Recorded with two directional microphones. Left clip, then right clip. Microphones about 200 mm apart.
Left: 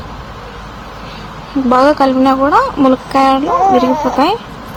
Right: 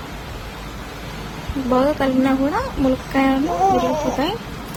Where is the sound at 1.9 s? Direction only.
30° left (ahead or behind).